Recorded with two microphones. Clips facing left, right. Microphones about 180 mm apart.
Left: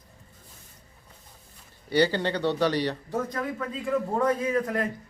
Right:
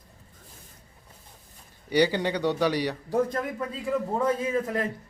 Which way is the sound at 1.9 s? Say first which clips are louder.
Even; 15° right (ahead or behind).